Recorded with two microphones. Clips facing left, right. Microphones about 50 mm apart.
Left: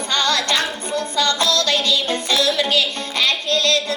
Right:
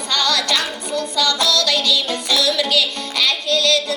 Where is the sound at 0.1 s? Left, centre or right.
Left.